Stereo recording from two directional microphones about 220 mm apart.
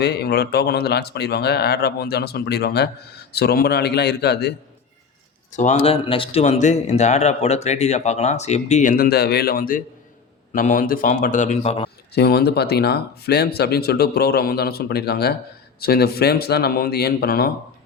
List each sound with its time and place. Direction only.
0.0 s speech: 45° left (ahead or behind)
5.5 s speech: 35° left (ahead or behind)
12.1 s speech: 45° left (ahead or behind)